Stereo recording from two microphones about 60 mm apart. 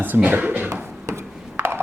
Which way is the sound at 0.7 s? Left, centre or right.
Right.